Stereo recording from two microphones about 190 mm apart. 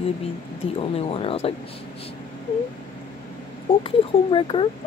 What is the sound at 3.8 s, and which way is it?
Speech, 25° left (ahead or behind).